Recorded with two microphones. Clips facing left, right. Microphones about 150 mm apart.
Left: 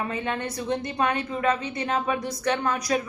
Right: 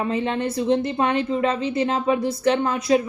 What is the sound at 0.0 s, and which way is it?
A woman's voice, 25° right (ahead or behind).